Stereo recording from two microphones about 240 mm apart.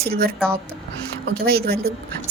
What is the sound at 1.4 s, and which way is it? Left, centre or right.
Speech, right.